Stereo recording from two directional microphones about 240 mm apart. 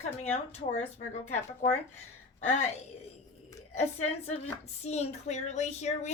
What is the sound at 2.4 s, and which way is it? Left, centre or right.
Speech, left.